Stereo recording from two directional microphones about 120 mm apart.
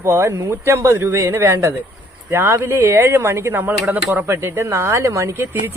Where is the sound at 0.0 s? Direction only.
25° right (ahead or behind).